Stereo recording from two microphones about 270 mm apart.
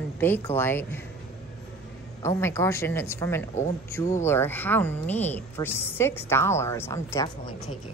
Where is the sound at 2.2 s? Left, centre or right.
Centre.